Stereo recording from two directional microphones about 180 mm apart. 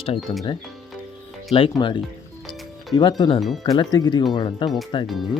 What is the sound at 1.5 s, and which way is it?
Speech, 30° left (ahead or behind).